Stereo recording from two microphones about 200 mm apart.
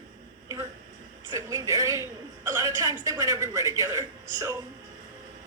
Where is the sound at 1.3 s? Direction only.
15° right (ahead or behind).